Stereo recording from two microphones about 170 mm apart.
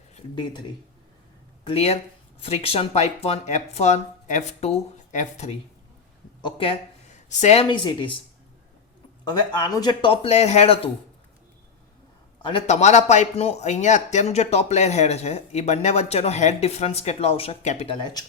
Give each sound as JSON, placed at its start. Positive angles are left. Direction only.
{"t": 1.6, "sound": "speech", "side_deg": 35}
{"t": 6.4, "sound": "speech", "side_deg": 30}
{"t": 9.5, "sound": "speech", "side_deg": 25}
{"t": 12.4, "sound": "a man's voice", "side_deg": 30}
{"t": 12.6, "sound": "speech", "side_deg": 45}